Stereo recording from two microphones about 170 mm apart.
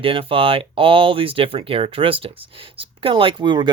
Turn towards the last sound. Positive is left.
turn(degrees=-30)  # may be behind; listen again after turning